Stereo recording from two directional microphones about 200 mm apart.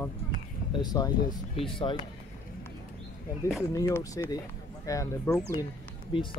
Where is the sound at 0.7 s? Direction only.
20° left (ahead or behind).